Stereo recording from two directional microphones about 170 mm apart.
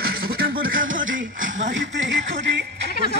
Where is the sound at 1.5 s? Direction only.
90° right.